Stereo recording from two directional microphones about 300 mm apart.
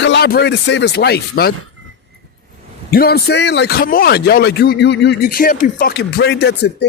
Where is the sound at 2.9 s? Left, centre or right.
Left.